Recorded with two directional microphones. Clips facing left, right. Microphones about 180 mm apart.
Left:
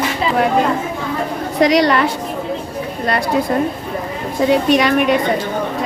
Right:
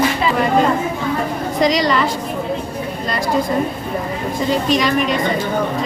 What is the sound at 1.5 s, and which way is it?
Speech, 65° left (ahead or behind).